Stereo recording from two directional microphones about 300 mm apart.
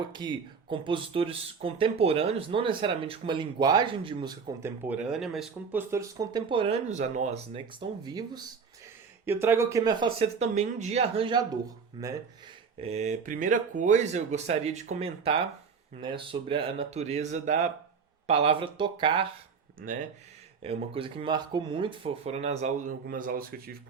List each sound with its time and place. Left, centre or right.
0.1 s speech: centre
19.8 s speech: right
20.6 s speech: centre